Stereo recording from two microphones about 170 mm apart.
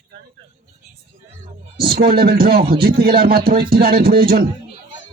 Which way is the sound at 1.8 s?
65° right (ahead or behind).